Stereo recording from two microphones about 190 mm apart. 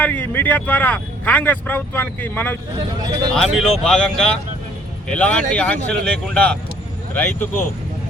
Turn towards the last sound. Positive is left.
turn(degrees=10)  # may be behind; listen again after turning